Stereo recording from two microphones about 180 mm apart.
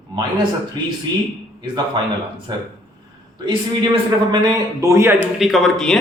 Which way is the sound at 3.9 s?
25° right (ahead or behind).